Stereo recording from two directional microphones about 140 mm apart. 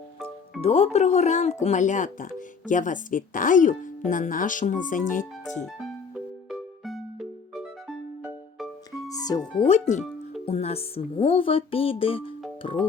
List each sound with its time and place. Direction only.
0.6 s speech: 45° left (ahead or behind); by 5.6 s 65° left (ahead or behind)
6.1 s music: centre (ahead or behind)
8.9 s music: 25° left (ahead or behind)
9.6 s speech: 55° left (ahead or behind); by 12.3 s 40° left (ahead or behind)